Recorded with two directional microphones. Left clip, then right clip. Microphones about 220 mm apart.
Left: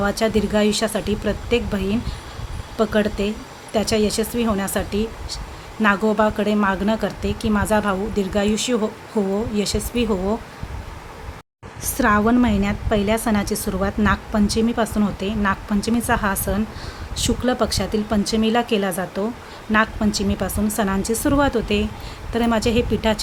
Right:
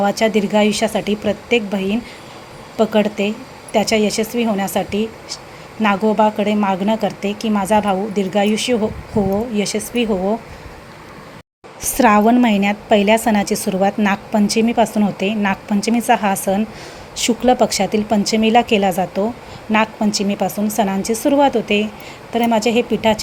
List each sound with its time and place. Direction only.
0.0 s speech: 5° right (ahead or behind)
11.8 s a woman's voice: 10° right (ahead or behind)